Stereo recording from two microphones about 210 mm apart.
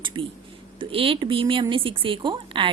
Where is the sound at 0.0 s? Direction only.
25° right (ahead or behind).